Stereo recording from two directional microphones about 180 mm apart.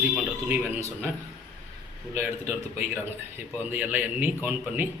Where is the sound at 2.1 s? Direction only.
10° right (ahead or behind).